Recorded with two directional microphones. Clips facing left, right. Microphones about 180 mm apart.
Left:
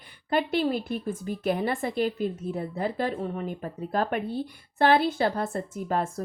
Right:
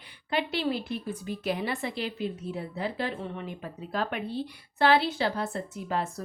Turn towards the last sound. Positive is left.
turn(degrees=50)  # may be behind; listen again after turning